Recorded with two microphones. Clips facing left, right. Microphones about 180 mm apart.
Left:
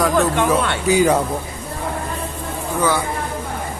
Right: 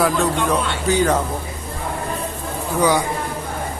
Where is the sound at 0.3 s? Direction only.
60° left (ahead or behind).